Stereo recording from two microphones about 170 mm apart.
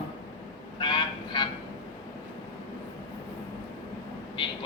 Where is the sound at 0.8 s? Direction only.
30° left (ahead or behind).